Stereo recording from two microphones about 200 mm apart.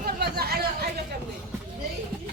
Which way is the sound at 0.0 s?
50° right (ahead or behind).